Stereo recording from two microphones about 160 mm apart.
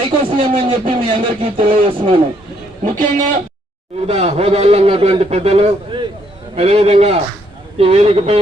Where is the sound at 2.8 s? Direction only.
55° right (ahead or behind).